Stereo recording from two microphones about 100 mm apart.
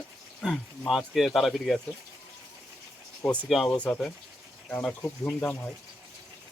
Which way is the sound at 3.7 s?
10° left (ahead or behind).